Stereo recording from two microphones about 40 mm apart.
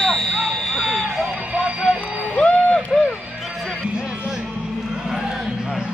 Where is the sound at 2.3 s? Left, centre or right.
Left.